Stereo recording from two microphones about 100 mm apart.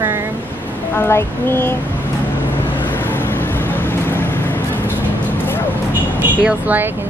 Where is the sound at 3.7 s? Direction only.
20° left (ahead or behind).